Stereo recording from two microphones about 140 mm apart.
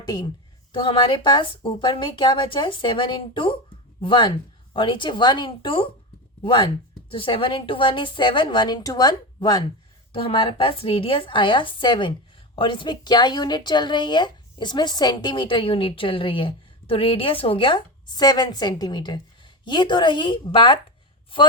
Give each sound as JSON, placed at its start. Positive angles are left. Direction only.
{"t": 0.0, "sound": "a woman's voice", "side_deg": 30}